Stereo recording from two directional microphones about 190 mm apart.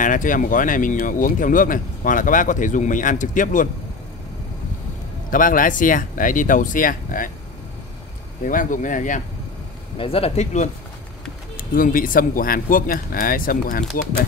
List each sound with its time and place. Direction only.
0.0 s speech: 45° left (ahead or behind)
5.3 s speech: 45° left (ahead or behind)
8.5 s speech: 45° left (ahead or behind)
9.9 s speech: 30° left (ahead or behind); by 13.8 s 50° left (ahead or behind)